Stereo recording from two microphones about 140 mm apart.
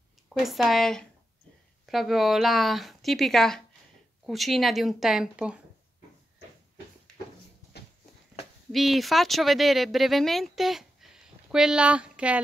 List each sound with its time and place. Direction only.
0.3 s speech: centre (ahead or behind)
8.7 s speech: centre (ahead or behind)